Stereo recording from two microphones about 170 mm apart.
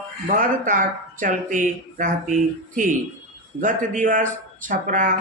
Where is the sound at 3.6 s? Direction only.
50° right (ahead or behind).